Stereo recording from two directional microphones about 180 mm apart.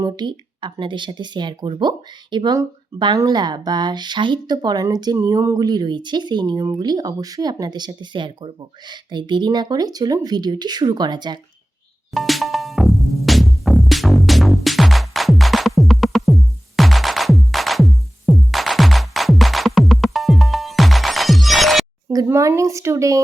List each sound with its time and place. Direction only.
0.0 s speech: 25° right (ahead or behind)
12.1 s music: centre (ahead or behind)
22.1 s speech: 20° right (ahead or behind)